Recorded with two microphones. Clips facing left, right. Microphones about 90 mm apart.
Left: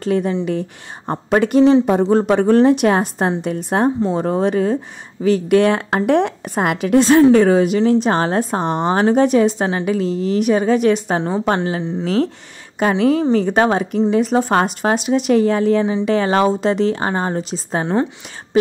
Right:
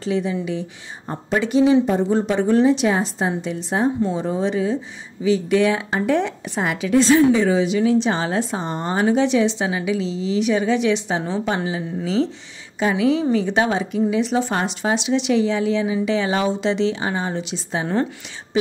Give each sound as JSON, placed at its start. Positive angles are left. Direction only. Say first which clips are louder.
{"t": 0.0, "sound": "speech", "louder": "left 4 dB", "side_deg": 50}
{"t": 1.0, "sound": "a woman's voice", "louder": "left 6 dB", "side_deg": 65}
{"t": 8.6, "sound": "speech", "louder": "left 6 dB", "side_deg": 65}
{"t": 9.0, "sound": "speech", "louder": "left 3 dB", "side_deg": 45}
{"t": 12.9, "sound": "speech", "louder": "left 3 dB", "side_deg": 45}